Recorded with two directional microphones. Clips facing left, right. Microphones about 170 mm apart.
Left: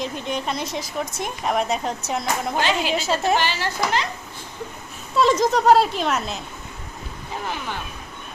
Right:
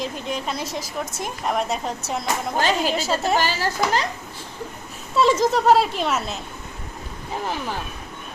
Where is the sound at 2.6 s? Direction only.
40° right (ahead or behind).